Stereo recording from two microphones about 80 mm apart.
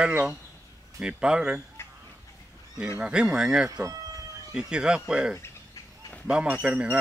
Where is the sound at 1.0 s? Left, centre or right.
Centre.